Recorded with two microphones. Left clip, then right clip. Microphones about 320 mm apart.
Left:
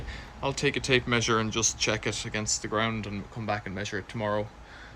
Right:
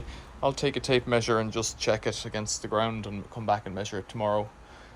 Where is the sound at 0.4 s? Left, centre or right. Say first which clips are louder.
Right 1 dB; centre.